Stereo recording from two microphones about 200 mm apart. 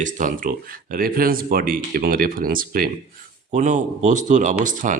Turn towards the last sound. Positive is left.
turn(degrees=-40)  # may be behind; listen again after turning